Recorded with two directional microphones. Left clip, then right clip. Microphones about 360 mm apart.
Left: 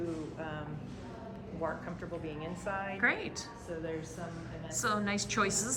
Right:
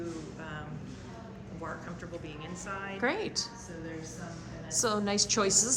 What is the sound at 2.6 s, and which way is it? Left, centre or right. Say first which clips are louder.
Speech: left 2 dB; centre.